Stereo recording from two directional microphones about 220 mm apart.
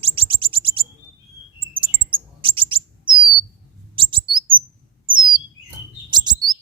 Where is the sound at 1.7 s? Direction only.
25° right (ahead or behind).